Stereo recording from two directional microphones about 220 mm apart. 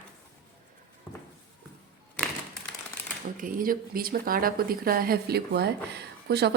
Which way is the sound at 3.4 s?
40° right (ahead or behind).